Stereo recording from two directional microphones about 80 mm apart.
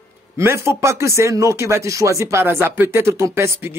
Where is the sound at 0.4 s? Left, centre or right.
Right.